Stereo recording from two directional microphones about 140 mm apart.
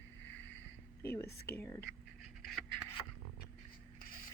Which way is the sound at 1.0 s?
20° left (ahead or behind).